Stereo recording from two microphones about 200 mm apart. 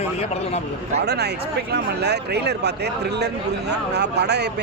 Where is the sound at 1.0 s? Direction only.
55° right (ahead or behind).